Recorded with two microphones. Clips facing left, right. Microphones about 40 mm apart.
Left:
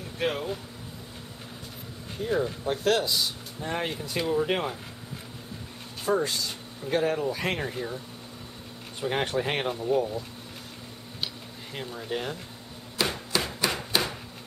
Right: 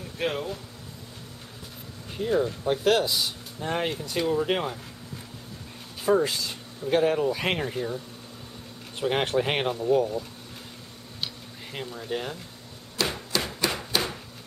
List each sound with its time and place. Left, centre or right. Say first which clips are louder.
0.2 s speech: even; centre
2.3 s speech: right 2 dB; centre
2.7 s speech: right 2 dB; centre
3.9 s speech: right 1 dB; centre
6.0 s speech: right 3 dB; centre
7.7 s speech: right 3 dB; centre
9.0 s speech: right 3 dB; centre
11.9 s speech: even; centre
12.9 s hammer: even; centre